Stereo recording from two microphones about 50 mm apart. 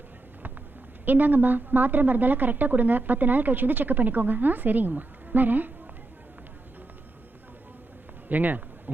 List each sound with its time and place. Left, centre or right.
1.0 s a woman's voice: right
8.3 s a woman's voice: right